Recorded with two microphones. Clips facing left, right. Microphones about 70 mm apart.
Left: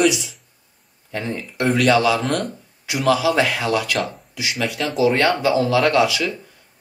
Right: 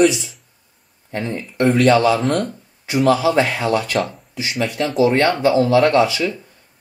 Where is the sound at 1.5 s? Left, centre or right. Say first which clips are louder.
Right 3 dB; right.